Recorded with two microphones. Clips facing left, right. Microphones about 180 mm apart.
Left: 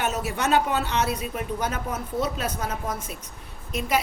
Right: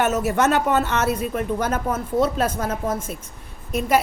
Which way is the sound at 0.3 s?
55° right (ahead or behind).